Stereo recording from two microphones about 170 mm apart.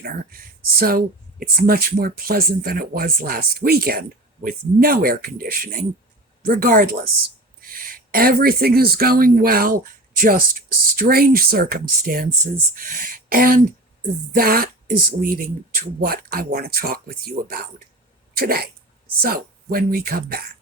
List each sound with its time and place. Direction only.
0.0 s speech: 60° right (ahead or behind)